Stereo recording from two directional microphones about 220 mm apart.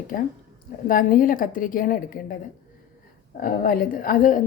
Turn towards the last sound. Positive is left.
turn(degrees=40)  # may be behind; listen again after turning